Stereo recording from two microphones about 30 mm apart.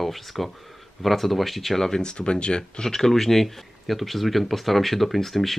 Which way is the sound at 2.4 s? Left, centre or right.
Left.